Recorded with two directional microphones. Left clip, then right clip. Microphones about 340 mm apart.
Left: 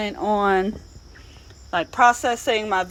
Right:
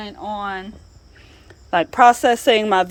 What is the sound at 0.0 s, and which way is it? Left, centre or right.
Speech, centre.